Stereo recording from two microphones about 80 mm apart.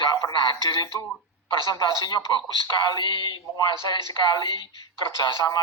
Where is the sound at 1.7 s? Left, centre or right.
Left.